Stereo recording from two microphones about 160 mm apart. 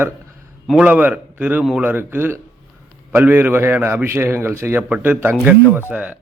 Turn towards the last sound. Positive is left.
turn(degrees=-10)  # may be behind; listen again after turning